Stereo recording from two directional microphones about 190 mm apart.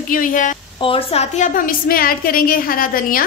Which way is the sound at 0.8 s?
30° left (ahead or behind).